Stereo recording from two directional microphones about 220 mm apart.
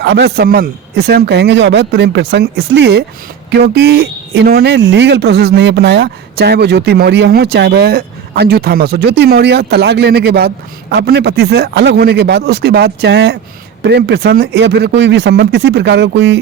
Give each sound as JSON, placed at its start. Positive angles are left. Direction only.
{"t": 0.0, "sound": "speech", "side_deg": -50}